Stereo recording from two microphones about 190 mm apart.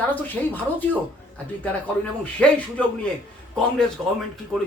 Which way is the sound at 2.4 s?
5° left (ahead or behind).